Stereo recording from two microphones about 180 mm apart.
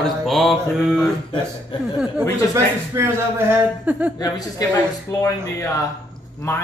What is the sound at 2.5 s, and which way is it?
A man's voice, 15° right (ahead or behind).